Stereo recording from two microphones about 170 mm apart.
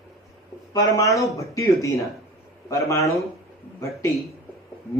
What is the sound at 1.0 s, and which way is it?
A man's voice, 20° left (ahead or behind).